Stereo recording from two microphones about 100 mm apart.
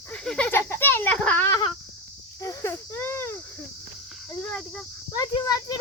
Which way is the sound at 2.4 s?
30° left (ahead or behind).